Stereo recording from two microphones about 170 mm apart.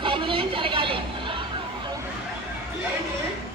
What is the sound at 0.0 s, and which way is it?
Vehicle, 30° right (ahead or behind).